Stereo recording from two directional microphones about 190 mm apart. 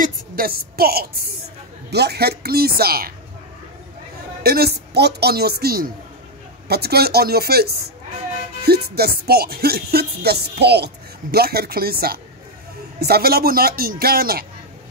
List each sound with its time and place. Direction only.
0.0 s a woman's voice: 50° right (ahead or behind)
1.9 s music: 60° right (ahead or behind)
4.4 s music: 55° right (ahead or behind)
11.3 s a man's voice: 55° right (ahead or behind)